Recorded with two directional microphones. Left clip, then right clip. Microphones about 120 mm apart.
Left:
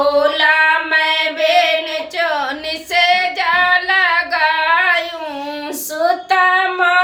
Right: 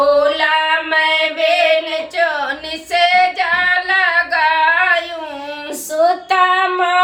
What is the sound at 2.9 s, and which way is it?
Female singing, 30° left (ahead or behind).